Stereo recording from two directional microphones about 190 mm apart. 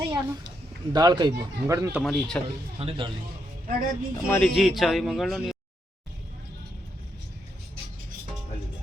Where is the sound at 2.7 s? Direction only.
30° right (ahead or behind).